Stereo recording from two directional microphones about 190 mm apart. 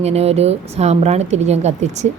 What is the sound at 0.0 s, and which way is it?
A woman's voice, 35° right (ahead or behind).